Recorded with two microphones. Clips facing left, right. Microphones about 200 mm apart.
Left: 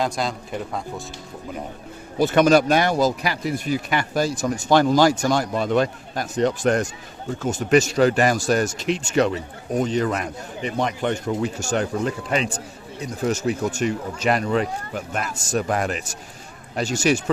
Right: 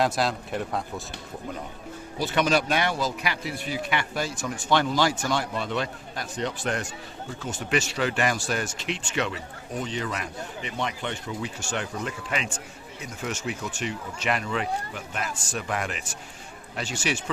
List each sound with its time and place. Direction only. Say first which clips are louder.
0.0 s speech: even; centre (ahead or behind)
2.1 s speech: left 8 dB; 50° left (ahead or behind)